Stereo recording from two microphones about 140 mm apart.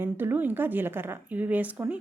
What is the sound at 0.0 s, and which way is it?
Speech, 15° right (ahead or behind).